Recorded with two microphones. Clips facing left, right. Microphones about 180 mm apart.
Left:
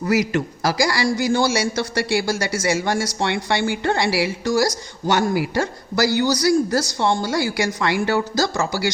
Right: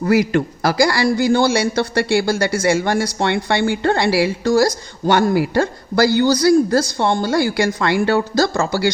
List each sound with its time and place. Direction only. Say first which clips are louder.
0.0 s a man's voice: right 4 dB; 55° right (ahead or behind)